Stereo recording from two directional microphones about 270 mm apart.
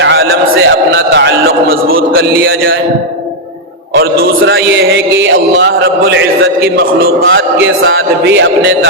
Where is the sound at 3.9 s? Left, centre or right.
Right.